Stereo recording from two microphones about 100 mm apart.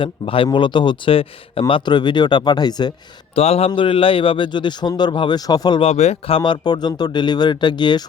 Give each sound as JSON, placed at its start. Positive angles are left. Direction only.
{"t": 0.0, "sound": "speech", "side_deg": 60}
{"t": 3.3, "sound": "speech", "side_deg": 85}
{"t": 3.8, "sound": "a man's voice", "side_deg": 60}
{"t": 5.4, "sound": "speech", "side_deg": 40}
{"t": 5.8, "sound": "speech", "side_deg": 90}